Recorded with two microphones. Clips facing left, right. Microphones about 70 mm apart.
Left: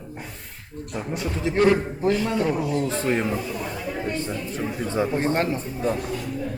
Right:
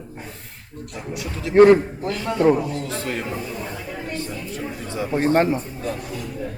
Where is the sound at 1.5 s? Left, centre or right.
Right.